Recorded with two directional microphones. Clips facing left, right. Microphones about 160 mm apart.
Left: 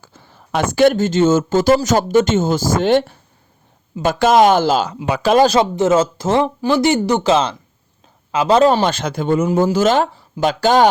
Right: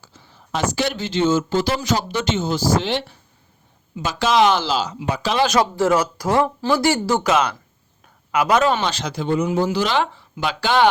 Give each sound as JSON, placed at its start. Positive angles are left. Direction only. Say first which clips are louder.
{"t": 0.0, "sound": "speech", "louder": "left 3 dB", "side_deg": 55}
{"t": 5.5, "sound": "speech", "louder": "left 3 dB", "side_deg": 20}
{"t": 8.9, "sound": "speech", "louder": "left 4 dB", "side_deg": 50}